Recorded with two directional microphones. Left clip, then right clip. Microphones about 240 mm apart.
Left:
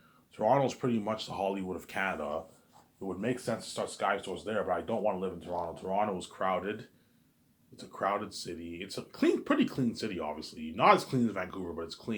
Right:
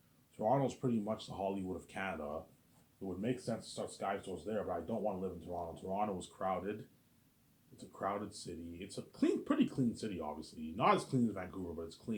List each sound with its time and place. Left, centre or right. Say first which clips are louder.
0.3 s speech: left 7 dB; centre
3.2 s speech: left 6 dB; centre
7.8 s speech: left 8 dB; centre